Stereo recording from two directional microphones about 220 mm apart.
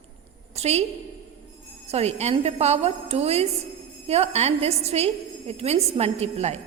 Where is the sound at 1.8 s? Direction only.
30° right (ahead or behind).